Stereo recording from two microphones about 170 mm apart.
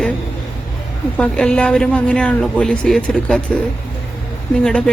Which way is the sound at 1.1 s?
5° left (ahead or behind).